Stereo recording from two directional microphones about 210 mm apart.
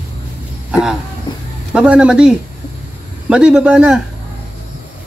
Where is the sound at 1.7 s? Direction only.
5° right (ahead or behind).